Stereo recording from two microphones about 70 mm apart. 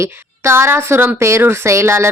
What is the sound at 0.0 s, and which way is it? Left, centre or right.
Speech, right.